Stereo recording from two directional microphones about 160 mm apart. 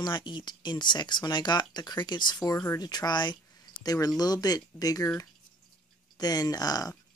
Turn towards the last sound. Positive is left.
turn(degrees=25)  # may be behind; listen again after turning